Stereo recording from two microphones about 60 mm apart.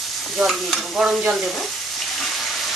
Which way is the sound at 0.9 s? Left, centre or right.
Centre.